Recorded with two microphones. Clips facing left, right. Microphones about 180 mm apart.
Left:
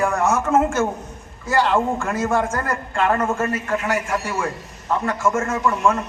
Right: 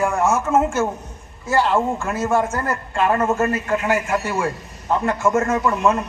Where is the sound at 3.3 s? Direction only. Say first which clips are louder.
Right 2 dB; 25° right (ahead or behind).